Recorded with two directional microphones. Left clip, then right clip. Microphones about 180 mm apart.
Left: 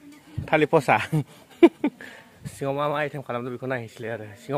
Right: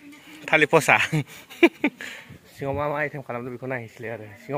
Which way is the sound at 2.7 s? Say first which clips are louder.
Even; centre (ahead or behind).